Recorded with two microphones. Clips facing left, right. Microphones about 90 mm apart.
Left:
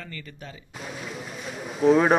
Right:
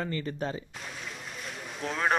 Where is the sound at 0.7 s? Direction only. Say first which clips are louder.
Left 5 dB; centre (ahead or behind).